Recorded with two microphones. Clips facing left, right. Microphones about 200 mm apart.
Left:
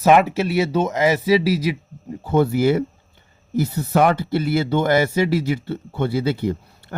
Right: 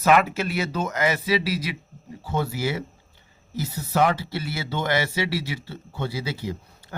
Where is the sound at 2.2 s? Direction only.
55° left (ahead or behind).